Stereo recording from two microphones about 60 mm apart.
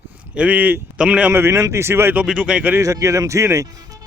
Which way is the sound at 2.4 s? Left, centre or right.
Right.